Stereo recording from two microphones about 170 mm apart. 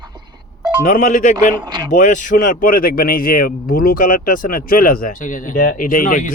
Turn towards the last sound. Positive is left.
turn(degrees=50)  # may be behind; listen again after turning